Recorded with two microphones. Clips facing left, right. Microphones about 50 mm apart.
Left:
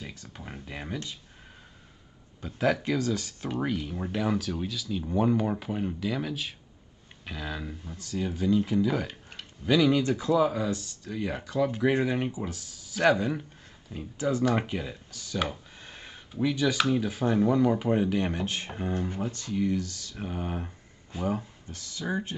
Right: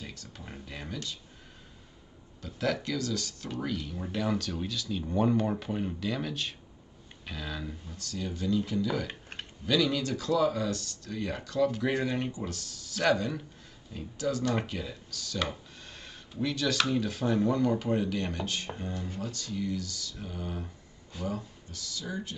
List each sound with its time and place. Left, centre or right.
0.0 s a sound: centre
2.4 s speech: left
15.8 s a sound: centre
16.9 s speech: centre
18.9 s speech: left
19.2 s speech: left